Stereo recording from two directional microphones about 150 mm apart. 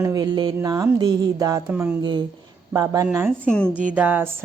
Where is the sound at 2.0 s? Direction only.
30° right (ahead or behind).